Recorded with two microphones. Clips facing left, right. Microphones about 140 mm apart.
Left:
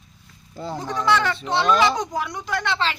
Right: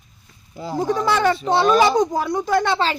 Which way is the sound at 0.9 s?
35° right (ahead or behind).